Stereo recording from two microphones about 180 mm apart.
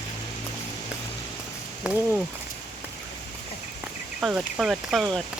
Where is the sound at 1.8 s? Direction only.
5° right (ahead or behind).